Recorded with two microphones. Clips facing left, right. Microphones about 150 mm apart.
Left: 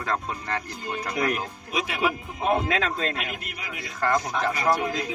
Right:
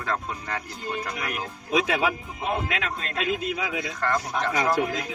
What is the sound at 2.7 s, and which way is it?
Speech, 35° left (ahead or behind).